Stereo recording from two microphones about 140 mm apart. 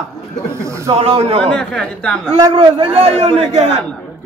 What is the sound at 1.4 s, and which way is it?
Speech, 5° left (ahead or behind).